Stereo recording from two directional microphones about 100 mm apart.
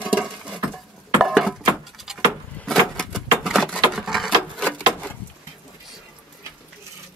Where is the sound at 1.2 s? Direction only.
5° right (ahead or behind).